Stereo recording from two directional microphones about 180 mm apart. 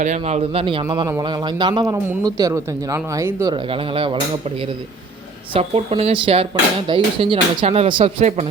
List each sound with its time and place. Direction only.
0.0 s speech: 40° right (ahead or behind); by 3.5 s 15° right (ahead or behind)
3.5 s speech: 30° right (ahead or behind)